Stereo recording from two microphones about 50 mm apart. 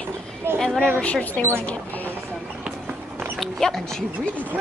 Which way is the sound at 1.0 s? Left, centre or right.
Left.